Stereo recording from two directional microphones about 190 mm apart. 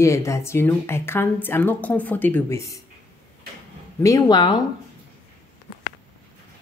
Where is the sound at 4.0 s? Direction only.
20° left (ahead or behind).